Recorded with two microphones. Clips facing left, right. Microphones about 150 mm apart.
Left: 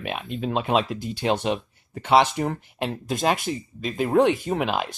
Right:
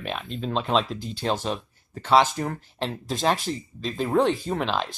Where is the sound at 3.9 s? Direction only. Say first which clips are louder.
Left 3 dB; 15° left (ahead or behind).